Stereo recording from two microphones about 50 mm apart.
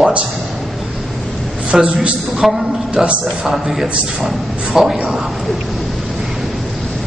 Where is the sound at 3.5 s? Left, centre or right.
Centre.